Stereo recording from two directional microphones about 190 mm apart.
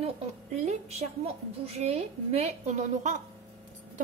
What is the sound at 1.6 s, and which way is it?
A woman's voice, 35° right (ahead or behind).